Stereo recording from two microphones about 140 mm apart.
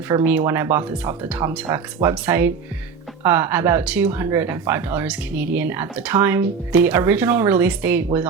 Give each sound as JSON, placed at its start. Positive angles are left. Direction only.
{"t": 0.3, "sound": "speech", "side_deg": -15}